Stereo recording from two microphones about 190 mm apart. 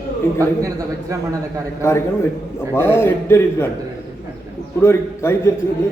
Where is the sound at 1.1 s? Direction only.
15° right (ahead or behind).